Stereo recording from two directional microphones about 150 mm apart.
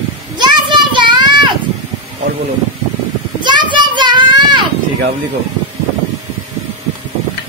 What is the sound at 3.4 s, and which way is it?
Children playing, 30° right (ahead or behind).